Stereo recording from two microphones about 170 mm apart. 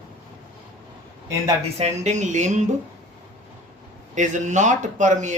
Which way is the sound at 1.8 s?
45° right (ahead or behind).